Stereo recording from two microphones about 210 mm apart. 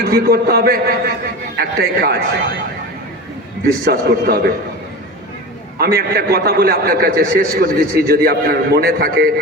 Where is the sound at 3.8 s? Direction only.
45° right (ahead or behind).